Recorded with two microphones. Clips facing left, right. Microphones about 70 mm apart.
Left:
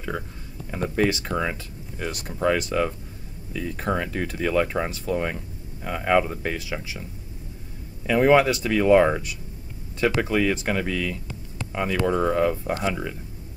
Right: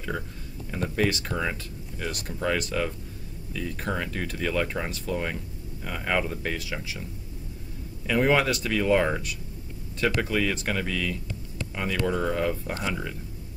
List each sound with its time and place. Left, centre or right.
0.7 s speech: centre
8.1 s speech: centre